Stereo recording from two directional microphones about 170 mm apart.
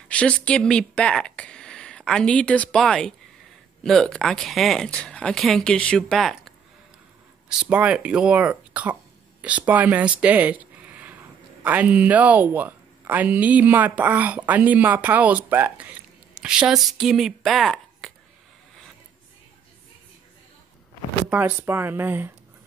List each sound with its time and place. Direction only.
0.1 s speech: 5° left (ahead or behind); by 10.1 s 10° right (ahead or behind)
10.2 s a sound: 10° right (ahead or behind)
11.6 s speech: 10° right (ahead or behind)
21.3 s speech: 10° right (ahead or behind)